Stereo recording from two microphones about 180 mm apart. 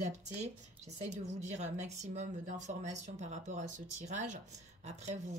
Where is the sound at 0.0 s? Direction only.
40° right (ahead or behind).